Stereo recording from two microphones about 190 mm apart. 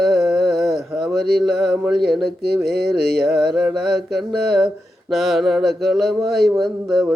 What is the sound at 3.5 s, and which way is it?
Mantra, centre (ahead or behind).